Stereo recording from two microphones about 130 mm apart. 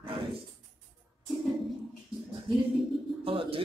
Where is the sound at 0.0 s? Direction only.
45° right (ahead or behind).